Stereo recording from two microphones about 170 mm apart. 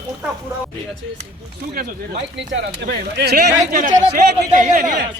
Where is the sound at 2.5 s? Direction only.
75° right (ahead or behind); by 4.9 s 50° right (ahead or behind).